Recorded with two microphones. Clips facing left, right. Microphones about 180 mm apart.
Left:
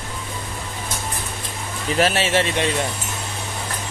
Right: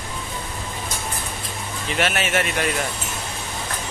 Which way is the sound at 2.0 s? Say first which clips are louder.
Left 4 dB; 30° left (ahead or behind).